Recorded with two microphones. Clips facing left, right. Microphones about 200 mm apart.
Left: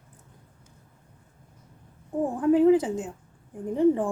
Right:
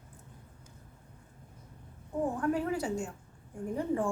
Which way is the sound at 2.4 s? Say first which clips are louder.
Left 16 dB; 20° left (ahead or behind).